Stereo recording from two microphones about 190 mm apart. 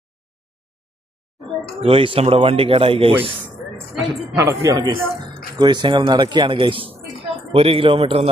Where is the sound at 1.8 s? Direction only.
30° right (ahead or behind).